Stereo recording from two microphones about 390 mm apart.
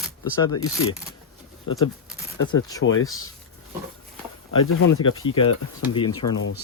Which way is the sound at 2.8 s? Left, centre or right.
Left.